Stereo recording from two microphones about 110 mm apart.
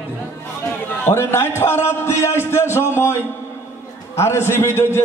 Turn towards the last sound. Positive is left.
turn(degrees=25)  # may be behind; listen again after turning